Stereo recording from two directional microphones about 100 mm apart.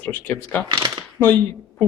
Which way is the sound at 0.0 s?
20° left (ahead or behind).